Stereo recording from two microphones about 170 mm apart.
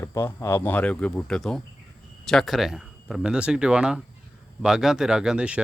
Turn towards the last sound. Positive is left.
turn(degrees=-5)  # may be behind; listen again after turning